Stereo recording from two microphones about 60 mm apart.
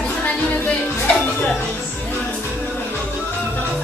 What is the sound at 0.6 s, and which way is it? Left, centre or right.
Music, left.